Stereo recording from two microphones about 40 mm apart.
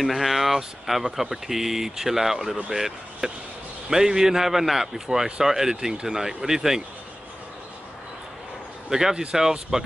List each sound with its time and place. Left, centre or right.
0.0 s a man's voice: centre
9.1 s speech: right
9.4 s a man's voice: centre